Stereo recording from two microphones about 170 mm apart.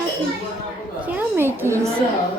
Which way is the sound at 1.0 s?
15° right (ahead or behind).